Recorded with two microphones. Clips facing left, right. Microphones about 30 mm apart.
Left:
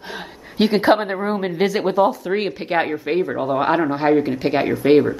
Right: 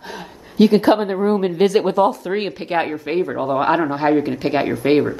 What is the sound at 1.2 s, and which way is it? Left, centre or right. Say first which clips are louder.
A woman's voice: right 4 dB; centre.